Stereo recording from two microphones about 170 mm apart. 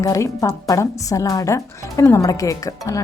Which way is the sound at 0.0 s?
20° left (ahead or behind).